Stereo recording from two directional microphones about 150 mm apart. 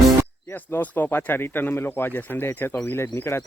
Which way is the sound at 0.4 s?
15° left (ahead or behind).